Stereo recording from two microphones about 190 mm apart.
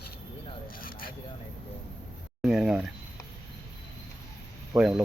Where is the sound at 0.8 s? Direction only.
50° left (ahead or behind).